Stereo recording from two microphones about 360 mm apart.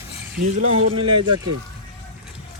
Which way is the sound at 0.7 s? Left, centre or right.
Right.